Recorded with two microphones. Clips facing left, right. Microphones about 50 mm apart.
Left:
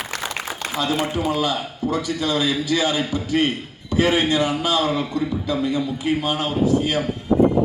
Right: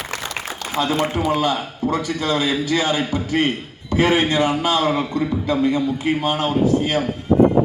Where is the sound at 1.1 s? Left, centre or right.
Right.